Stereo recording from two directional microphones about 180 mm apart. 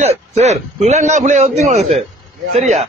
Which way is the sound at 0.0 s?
40° right (ahead or behind).